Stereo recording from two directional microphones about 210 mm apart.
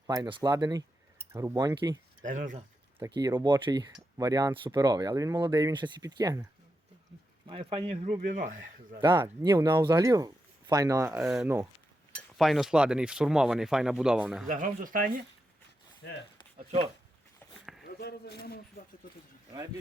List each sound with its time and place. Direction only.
0.1 s speech: 20° right (ahead or behind)
2.2 s speech: 40° right (ahead or behind)
3.2 s speech: 20° right (ahead or behind)
7.4 s speech: 25° right (ahead or behind)
9.0 s speech: 20° right (ahead or behind); by 14.4 s 5° right (ahead or behind)
14.4 s speech: 40° right (ahead or behind)
16.0 s speech: 55° left (ahead or behind)
16.6 s speech: 25° right (ahead or behind)
17.4 s a sound: 10° left (ahead or behind)
17.8 s a man's voice: 50° left (ahead or behind)